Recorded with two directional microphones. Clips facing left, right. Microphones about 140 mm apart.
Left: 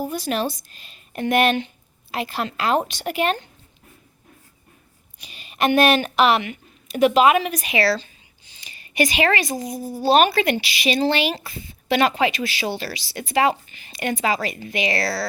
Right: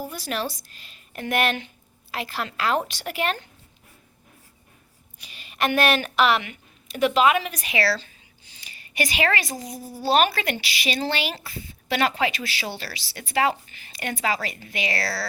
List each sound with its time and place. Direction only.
0.0 s speech: 20° left (ahead or behind)
5.2 s a woman's voice: 20° left (ahead or behind)